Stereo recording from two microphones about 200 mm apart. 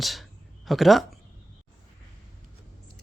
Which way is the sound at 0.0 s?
Centre (ahead or behind).